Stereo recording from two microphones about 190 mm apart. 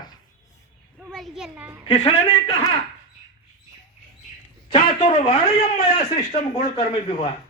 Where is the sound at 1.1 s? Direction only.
Centre (ahead or behind).